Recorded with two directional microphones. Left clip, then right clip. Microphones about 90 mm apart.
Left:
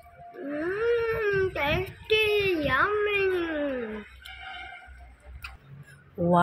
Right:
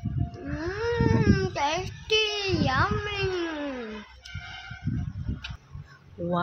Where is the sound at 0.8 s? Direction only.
50° right (ahead or behind).